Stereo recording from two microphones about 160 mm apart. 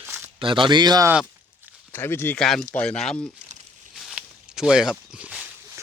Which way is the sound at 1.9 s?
15° left (ahead or behind).